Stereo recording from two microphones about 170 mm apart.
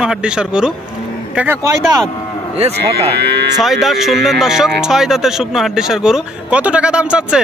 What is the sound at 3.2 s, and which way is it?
Speech, 75° right (ahead or behind).